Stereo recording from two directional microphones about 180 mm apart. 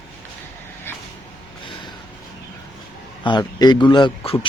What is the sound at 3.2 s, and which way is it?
Speech, 25° left (ahead or behind).